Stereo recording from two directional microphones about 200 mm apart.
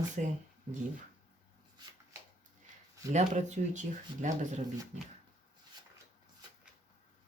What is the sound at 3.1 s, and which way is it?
Speech, 35° right (ahead or behind).